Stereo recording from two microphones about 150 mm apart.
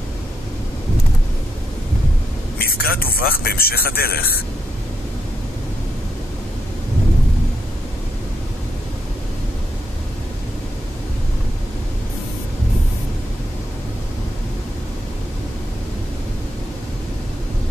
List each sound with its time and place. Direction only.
2.6 s speech: 85° left